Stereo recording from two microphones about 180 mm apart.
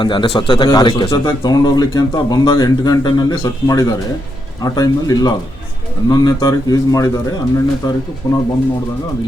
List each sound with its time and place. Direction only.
0.0 s speech: 25° left (ahead or behind)